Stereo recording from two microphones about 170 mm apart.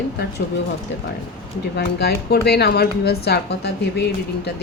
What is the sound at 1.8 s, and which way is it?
Speech, 75° left (ahead or behind).